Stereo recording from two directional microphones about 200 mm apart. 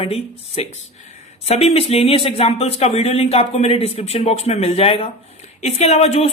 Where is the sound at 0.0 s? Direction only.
30° left (ahead or behind).